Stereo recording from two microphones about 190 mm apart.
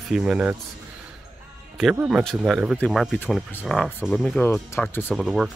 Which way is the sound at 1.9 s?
10° right (ahead or behind).